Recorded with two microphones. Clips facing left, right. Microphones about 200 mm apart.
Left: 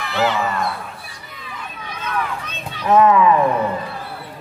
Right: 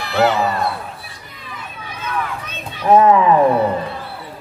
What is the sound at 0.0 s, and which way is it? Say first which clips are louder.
Speech: right 4 dB; 40° right (ahead or behind).